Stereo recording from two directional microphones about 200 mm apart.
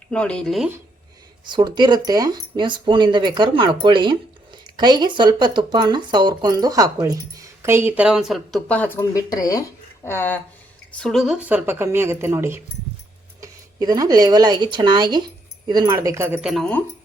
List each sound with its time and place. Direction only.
0.1 s speech: 5° left (ahead or behind)
1.5 s a woman's voice: 20° right (ahead or behind); by 16.8 s 5° left (ahead or behind)